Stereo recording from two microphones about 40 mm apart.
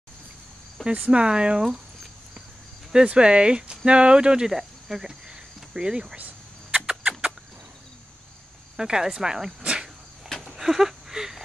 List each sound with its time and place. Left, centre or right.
0.9 s speech: right
2.9 s speech: right
4.6 s cricket: centre
5.3 s cricket: right
6.1 s cricket: right
6.9 s chicken: right
8.7 s speech: centre
9.6 s cricket: right
10.5 s a sound: centre